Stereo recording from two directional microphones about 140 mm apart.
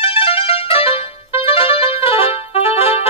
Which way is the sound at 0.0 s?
45° left (ahead or behind).